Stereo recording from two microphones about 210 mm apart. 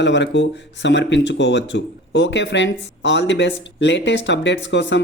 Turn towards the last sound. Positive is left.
turn(degrees=60)  # may be behind; listen again after turning